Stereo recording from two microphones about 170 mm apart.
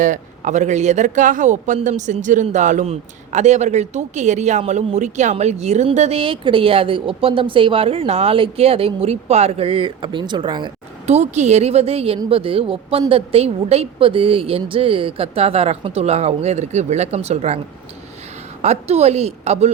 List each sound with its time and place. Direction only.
0.0 s speech: 45° right (ahead or behind); by 10.7 s 25° right (ahead or behind)
11.0 s speech: 40° right (ahead or behind)
18.6 s speech: 40° right (ahead or behind)